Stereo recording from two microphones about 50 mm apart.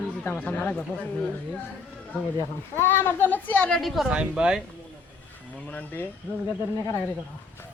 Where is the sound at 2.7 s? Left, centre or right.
Left.